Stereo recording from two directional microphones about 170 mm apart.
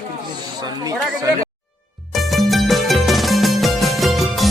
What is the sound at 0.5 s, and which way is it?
Speech, 25° right (ahead or behind).